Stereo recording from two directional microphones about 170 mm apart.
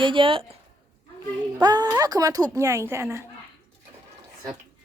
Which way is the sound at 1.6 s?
25° right (ahead or behind).